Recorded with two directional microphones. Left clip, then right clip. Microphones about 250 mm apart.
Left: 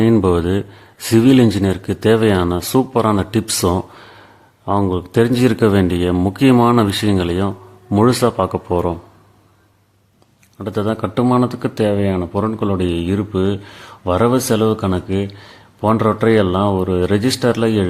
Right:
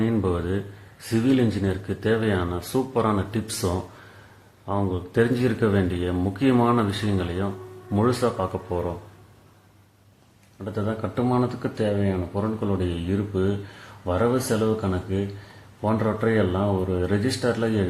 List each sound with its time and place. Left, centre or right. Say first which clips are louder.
0.0 s speech: left 11 dB; left
10.6 s speech: left 9 dB; left